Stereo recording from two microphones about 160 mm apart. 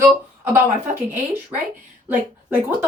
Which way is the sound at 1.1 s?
15° right (ahead or behind).